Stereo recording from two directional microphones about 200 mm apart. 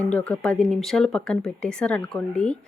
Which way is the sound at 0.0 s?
5° left (ahead or behind).